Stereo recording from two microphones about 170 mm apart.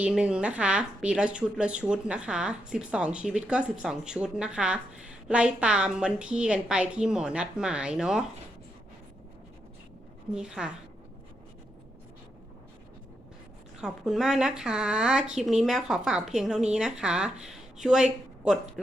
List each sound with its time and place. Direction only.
0.0 s a woman's voice: 5° right (ahead or behind)
10.3 s a woman's voice: 5° right (ahead or behind)
13.8 s a woman's voice: 5° right (ahead or behind)